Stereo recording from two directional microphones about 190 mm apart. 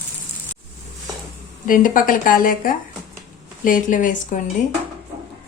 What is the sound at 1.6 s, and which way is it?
A woman's voice, 45° left (ahead or behind).